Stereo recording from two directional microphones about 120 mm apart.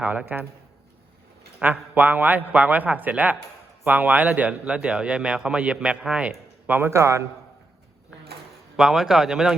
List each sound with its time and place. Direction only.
0.0 s a man's voice: 15° right (ahead or behind)
1.5 s a man's voice: 15° right (ahead or behind)
6.7 s a man's voice: 20° right (ahead or behind)
8.7 s speech: 5° right (ahead or behind)